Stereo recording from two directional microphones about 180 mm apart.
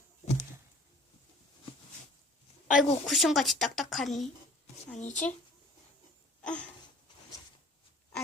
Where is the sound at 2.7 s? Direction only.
40° left (ahead or behind).